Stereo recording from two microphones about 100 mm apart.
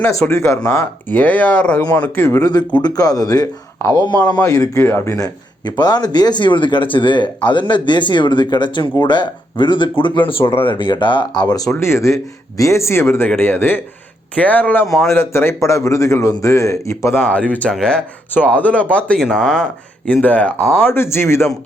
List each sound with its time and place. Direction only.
0.1 s speech: 30° left (ahead or behind)
0.8 s speech: 15° left (ahead or behind)
2.4 s speech: 40° left (ahead or behind)
4.8 s speech: 25° left (ahead or behind)
5.1 s speech: 40° left (ahead or behind)
11.8 s speech: 25° left (ahead or behind)
17.2 s speech: 15° left (ahead or behind)
20.8 s speech: 25° left (ahead or behind)